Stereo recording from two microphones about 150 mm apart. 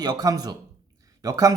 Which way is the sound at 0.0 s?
25° right (ahead or behind).